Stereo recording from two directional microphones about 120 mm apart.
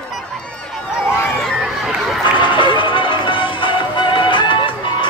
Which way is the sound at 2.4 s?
45° left (ahead or behind).